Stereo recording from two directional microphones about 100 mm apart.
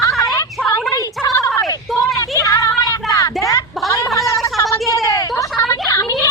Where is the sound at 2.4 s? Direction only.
35° left (ahead or behind).